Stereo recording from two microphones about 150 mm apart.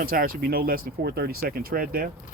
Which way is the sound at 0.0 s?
70° right (ahead or behind).